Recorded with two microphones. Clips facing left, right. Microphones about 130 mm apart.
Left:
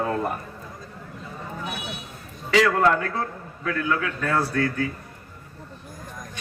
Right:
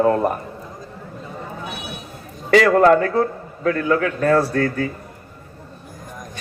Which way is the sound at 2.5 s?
55° right (ahead or behind).